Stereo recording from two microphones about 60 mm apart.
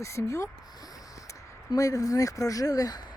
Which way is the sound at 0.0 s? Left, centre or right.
Left.